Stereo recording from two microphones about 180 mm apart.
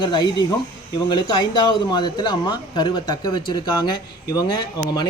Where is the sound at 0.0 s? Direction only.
25° left (ahead or behind).